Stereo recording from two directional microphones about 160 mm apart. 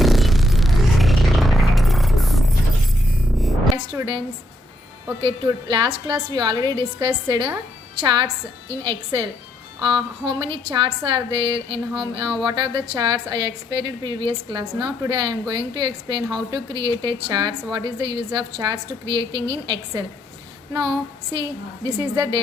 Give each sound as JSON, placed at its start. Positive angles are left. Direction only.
{"t": 0.0, "sound": "a sound", "side_deg": 0}
{"t": 3.9, "sound": "a woman's voice", "side_deg": -30}
{"t": 5.2, "sound": "a woman's voice", "side_deg": -30}
{"t": 21.8, "sound": "a woman's voice", "side_deg": -30}